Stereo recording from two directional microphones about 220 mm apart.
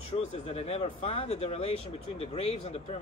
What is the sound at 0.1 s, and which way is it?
Speech, 30° left (ahead or behind).